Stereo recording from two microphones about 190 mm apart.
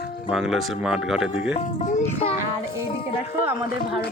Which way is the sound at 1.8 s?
35° left (ahead or behind).